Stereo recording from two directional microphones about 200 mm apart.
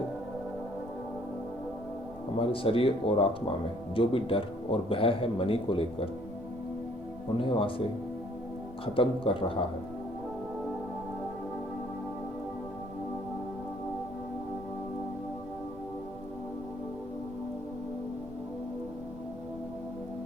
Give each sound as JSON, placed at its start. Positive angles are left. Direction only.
{"t": 2.5, "sound": "speech", "side_deg": 25}
{"t": 7.3, "sound": "speech", "side_deg": 25}
{"t": 9.0, "sound": "speech", "side_deg": 25}